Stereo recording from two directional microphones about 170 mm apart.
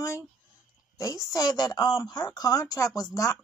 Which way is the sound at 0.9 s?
20° left (ahead or behind).